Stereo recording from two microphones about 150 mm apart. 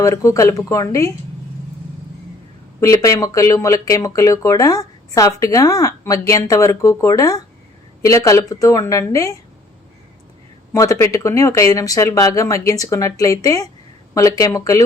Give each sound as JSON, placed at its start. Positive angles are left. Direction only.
{"t": 0.0, "sound": "speech", "side_deg": 20}
{"t": 2.8, "sound": "speech", "side_deg": 20}
{"t": 10.7, "sound": "speech", "side_deg": 20}